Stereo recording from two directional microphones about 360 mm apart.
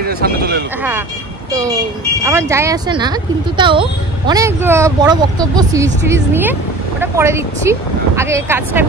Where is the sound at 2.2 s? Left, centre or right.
Centre.